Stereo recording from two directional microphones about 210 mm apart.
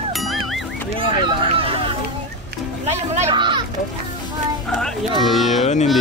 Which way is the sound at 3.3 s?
20° right (ahead or behind).